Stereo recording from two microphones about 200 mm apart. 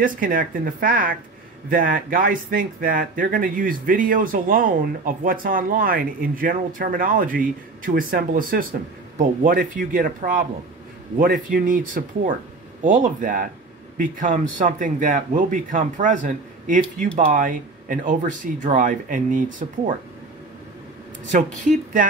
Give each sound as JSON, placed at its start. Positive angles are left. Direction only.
{"t": 0.0, "sound": "speech", "side_deg": -45}
{"t": 21.3, "sound": "speech", "side_deg": -40}